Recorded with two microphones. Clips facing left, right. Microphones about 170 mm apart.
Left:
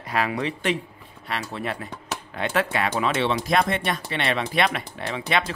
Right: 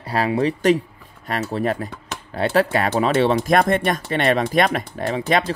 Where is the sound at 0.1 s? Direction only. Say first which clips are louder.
Right 6 dB; 35° right (ahead or behind).